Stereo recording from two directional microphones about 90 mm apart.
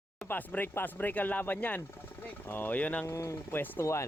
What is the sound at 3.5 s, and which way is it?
Speech, 25° left (ahead or behind).